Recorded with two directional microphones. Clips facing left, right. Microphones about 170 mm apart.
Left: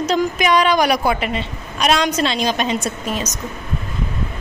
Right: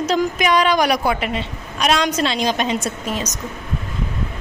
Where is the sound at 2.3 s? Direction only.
15° right (ahead or behind).